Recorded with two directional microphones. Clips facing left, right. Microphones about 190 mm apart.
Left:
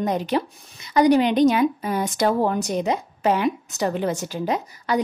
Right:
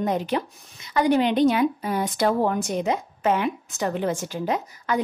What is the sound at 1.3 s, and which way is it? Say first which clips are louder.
Speech: left 2 dB; 45° left (ahead or behind).